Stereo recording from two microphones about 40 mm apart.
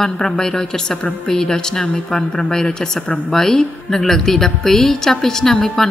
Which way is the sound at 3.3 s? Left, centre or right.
Centre.